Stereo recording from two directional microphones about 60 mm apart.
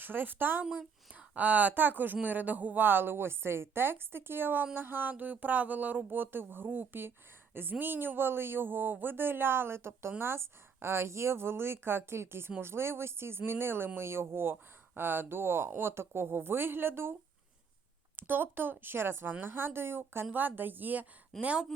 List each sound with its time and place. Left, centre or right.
0.0 s speech: right
0.6 s speech: right
18.2 s speech: right
21.3 s speech: centre